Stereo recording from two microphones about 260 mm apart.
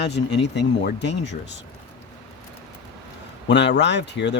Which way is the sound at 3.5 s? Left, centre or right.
Left.